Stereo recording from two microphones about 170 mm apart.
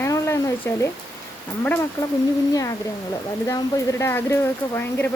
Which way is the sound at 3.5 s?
20° left (ahead or behind).